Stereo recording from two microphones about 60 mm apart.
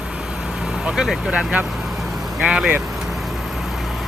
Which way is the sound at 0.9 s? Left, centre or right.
Centre.